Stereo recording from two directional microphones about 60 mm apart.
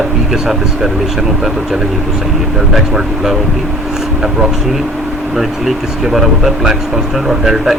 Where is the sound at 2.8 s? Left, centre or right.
Centre.